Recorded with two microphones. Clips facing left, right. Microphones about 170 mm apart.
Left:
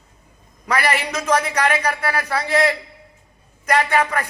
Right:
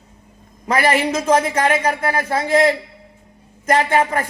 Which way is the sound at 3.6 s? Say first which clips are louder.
Right 2 dB; 25° right (ahead or behind).